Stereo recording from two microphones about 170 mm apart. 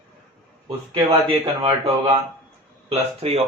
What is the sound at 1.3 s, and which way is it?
Speech, 35° right (ahead or behind).